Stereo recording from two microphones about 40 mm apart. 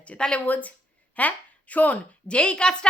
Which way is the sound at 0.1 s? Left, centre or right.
Left.